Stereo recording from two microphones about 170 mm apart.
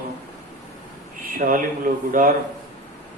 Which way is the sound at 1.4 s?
50° right (ahead or behind).